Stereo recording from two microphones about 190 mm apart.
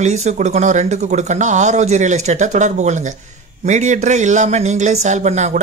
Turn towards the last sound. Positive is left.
turn(degrees=-35)  # may be behind; listen again after turning